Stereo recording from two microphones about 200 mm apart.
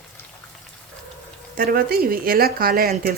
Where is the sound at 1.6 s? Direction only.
50° right (ahead or behind).